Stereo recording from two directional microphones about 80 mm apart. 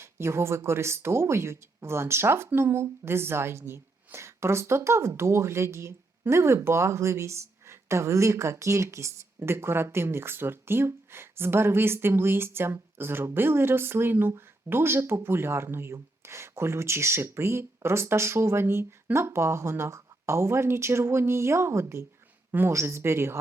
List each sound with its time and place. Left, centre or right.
0.0 s speech: right